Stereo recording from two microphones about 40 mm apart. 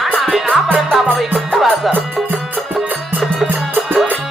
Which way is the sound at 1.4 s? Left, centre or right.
Centre.